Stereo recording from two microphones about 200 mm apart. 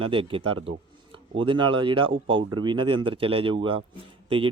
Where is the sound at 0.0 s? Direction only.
25° right (ahead or behind).